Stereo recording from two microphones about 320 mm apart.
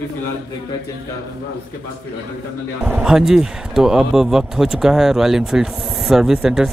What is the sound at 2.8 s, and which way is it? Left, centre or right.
Speech, centre.